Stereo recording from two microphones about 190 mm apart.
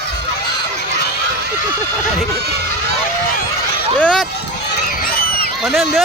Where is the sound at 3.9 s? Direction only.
5° left (ahead or behind).